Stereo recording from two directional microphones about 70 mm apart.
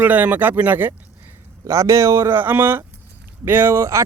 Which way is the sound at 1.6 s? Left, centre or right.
Right.